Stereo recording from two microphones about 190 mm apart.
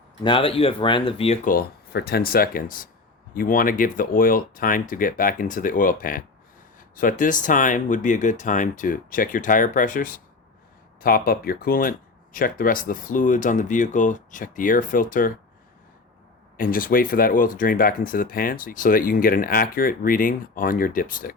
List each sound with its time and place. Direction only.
0.2 s speech: 25° left (ahead or behind)
1.5 s speech: 55° left (ahead or behind)
16.6 s speech: 50° left (ahead or behind)